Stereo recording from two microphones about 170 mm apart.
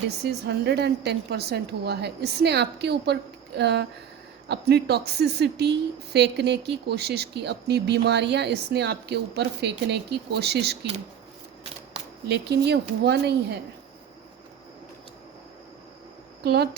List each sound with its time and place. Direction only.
0.3 s speech: 80° right
12.3 s speech: 80° right
16.4 s speech: 75° right (ahead or behind)